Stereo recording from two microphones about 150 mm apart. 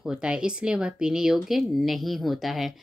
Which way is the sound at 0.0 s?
5° right (ahead or behind).